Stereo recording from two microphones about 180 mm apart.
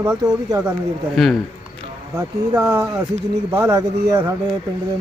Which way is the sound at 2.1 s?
15° right (ahead or behind).